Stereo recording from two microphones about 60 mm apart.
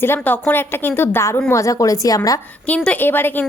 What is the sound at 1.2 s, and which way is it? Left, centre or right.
A woman's voice, left.